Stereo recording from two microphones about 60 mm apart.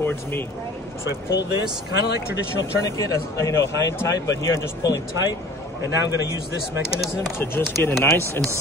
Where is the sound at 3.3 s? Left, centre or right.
Left.